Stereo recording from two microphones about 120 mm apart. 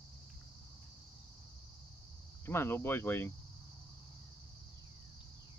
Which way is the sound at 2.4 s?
20° left (ahead or behind).